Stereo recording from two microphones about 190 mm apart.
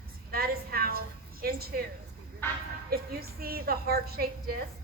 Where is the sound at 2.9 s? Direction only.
55° right (ahead or behind).